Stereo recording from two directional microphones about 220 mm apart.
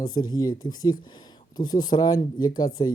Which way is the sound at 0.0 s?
20° left (ahead or behind).